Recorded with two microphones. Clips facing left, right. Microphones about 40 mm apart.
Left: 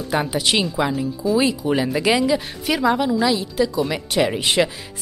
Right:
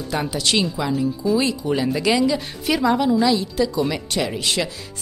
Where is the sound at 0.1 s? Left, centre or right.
Centre.